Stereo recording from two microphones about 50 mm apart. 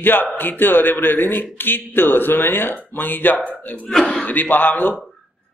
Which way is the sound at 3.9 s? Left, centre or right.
Centre.